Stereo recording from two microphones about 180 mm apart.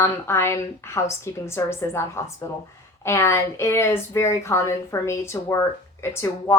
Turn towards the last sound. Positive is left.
turn(degrees=15)  # may be behind; listen again after turning